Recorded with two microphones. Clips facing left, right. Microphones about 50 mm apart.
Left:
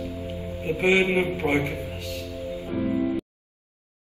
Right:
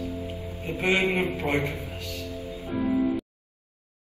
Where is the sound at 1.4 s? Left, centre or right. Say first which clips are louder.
Left 3 dB; left.